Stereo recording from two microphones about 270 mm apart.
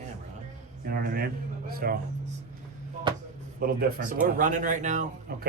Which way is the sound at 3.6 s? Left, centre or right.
Right.